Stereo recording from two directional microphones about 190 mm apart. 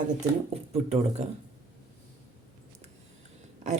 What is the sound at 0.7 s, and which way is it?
Speech, 35° right (ahead or behind).